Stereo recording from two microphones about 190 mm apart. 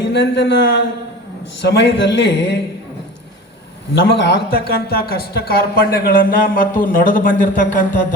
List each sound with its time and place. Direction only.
0.0 s a man's voice: 65° left (ahead or behind)
4.2 s speech: 60° left (ahead or behind); by 7.9 s 45° left (ahead or behind)